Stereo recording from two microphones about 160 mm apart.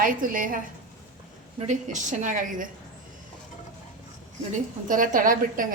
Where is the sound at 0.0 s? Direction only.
60° right (ahead or behind).